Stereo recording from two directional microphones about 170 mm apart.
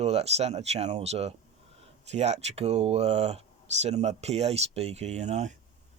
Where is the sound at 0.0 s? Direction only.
35° right (ahead or behind).